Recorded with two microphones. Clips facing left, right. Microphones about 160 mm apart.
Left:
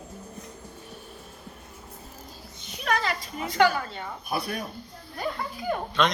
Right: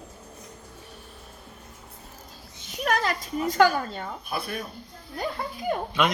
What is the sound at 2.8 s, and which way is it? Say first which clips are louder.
Speech: right 2 dB; 45° right (ahead or behind).